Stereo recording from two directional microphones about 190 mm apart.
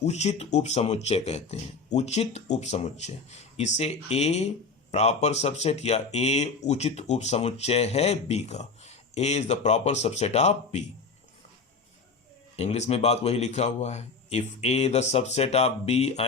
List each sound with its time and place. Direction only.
0.0 s speech: 35° left (ahead or behind)
12.5 s speech: 35° left (ahead or behind)